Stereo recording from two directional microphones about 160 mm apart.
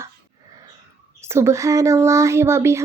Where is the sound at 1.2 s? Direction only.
15° right (ahead or behind).